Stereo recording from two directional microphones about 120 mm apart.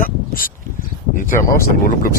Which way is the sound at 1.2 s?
90° left.